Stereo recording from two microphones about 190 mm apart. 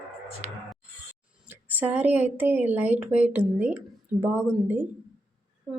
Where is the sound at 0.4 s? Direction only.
35° right (ahead or behind).